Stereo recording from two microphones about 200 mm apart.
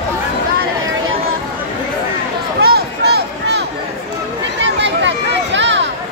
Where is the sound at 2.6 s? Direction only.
55° right (ahead or behind).